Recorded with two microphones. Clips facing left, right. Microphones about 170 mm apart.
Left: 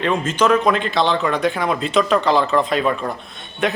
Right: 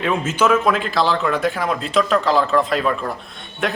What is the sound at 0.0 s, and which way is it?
Speech, 5° right (ahead or behind).